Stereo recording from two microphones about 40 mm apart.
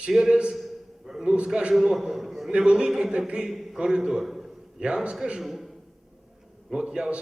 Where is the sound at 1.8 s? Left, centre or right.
Centre.